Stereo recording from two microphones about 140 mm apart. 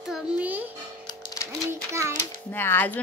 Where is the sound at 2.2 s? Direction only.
15° left (ahead or behind).